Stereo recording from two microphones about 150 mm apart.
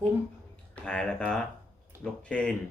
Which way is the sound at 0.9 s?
5° left (ahead or behind).